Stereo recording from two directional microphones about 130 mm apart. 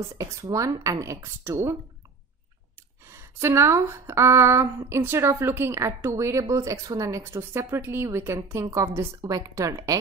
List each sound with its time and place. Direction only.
0.2 s speech: 25° right (ahead or behind)
3.1 s speech: 20° right (ahead or behind)